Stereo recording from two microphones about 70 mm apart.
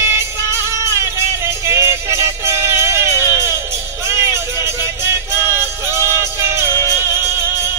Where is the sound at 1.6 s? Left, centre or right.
Right.